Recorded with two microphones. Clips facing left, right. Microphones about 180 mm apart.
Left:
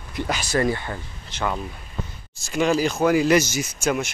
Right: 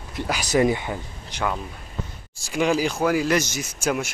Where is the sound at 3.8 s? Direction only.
10° right (ahead or behind).